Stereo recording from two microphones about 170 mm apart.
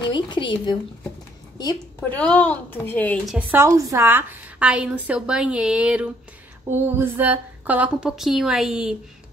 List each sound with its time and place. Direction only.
0.1 s a woman's voice: 25° left (ahead or behind)
2.0 s a woman's voice: 10° left (ahead or behind)
3.3 s a woman's voice: 10° right (ahead or behind)